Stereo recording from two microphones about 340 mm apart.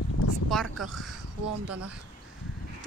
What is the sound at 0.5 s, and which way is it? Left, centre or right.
Speech, centre.